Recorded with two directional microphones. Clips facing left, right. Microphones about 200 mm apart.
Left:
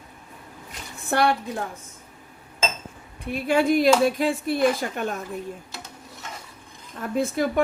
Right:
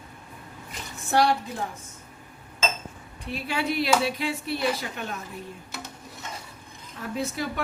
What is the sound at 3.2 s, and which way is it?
Speech, 50° left (ahead or behind).